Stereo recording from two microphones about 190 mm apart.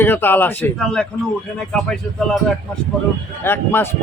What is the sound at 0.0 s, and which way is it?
Speech, 10° left (ahead or behind).